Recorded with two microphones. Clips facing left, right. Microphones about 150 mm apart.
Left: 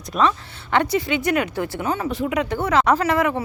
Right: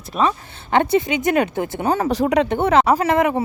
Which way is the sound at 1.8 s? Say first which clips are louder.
Right 7 dB; 35° right (ahead or behind).